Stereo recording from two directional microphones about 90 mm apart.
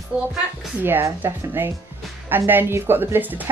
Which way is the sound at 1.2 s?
25° right (ahead or behind).